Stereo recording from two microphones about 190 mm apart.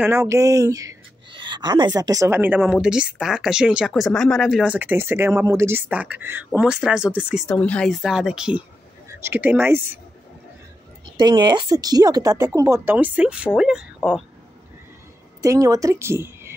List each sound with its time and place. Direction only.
0.0 s speech: 15° right (ahead or behind)
7.5 s speech: 5° left (ahead or behind); by 9.8 s 10° right (ahead or behind)
11.1 s speech: 25° right (ahead or behind); by 14.2 s 5° right (ahead or behind)
15.4 s speech: 15° right (ahead or behind)